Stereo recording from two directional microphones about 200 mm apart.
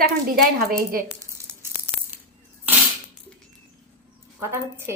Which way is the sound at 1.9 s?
25° right (ahead or behind).